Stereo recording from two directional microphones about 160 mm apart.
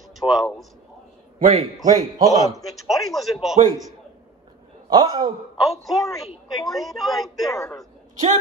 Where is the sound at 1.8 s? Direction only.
25° right (ahead or behind).